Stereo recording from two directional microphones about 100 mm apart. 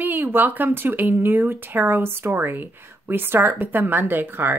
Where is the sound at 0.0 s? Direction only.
20° right (ahead or behind).